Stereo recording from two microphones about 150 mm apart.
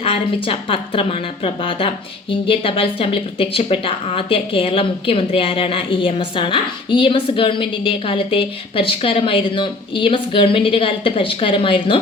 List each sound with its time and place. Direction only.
0.0 s speech: 35° left (ahead or behind)